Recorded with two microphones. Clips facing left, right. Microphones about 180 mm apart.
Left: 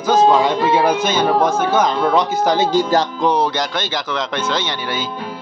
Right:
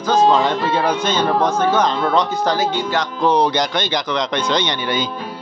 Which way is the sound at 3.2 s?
10° left (ahead or behind).